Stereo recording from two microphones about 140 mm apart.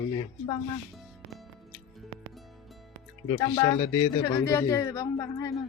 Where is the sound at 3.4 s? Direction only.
30° left (ahead or behind).